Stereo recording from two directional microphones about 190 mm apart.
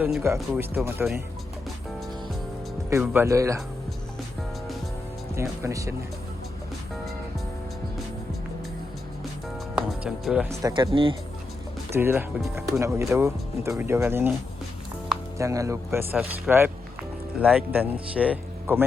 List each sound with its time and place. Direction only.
0.0 s speech: 10° right (ahead or behind)
2.9 s speech: 10° right (ahead or behind)
5.3 s speech: 15° right (ahead or behind)
9.7 s music: 5° right (ahead or behind)
10.6 s speech: 20° right (ahead or behind)
11.9 s speech: 10° right (ahead or behind)
15.4 s speech: 15° right (ahead or behind)